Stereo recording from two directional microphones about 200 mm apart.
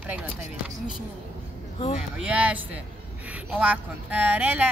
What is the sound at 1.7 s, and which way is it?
Speech, 30° left (ahead or behind).